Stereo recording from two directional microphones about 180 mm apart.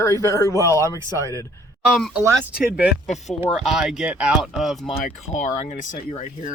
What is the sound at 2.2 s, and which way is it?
Speech, 10° right (ahead or behind).